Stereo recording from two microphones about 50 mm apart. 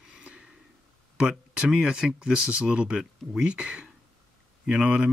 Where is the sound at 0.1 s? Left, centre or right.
Right.